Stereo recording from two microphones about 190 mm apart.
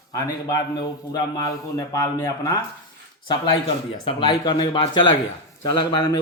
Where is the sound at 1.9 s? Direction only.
20° left (ahead or behind).